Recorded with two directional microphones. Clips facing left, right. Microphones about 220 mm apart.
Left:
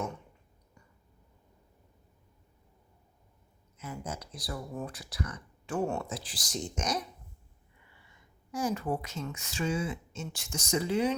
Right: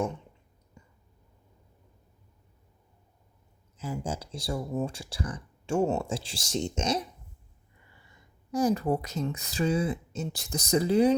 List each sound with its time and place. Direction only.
3.8 s speech: 30° right (ahead or behind)
8.5 s speech: 35° right (ahead or behind)